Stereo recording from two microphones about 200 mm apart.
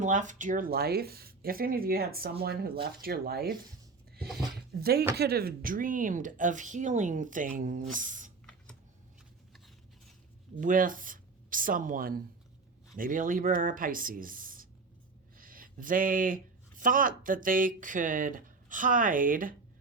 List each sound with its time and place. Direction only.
0.0 s speech: 40° right (ahead or behind)
4.5 s a sound: 50° right (ahead or behind)
5.1 s a woman's voice: 50° right (ahead or behind)
10.6 s speech: 40° right (ahead or behind)